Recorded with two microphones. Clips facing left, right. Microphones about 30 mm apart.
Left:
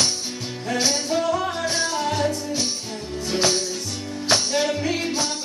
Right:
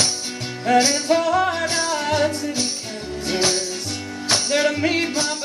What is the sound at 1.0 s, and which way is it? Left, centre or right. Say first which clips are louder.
Music: right 4 dB; right.